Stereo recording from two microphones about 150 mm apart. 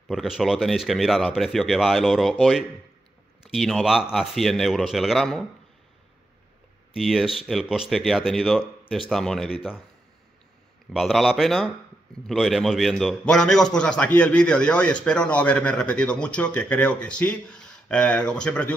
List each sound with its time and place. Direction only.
0.1 s speech: centre (ahead or behind)
7.0 s speech: centre (ahead or behind)
10.9 s a man's voice: centre (ahead or behind)